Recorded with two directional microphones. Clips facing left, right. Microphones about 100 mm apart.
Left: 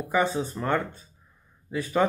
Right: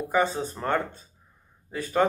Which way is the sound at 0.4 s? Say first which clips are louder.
Even; 35° right (ahead or behind).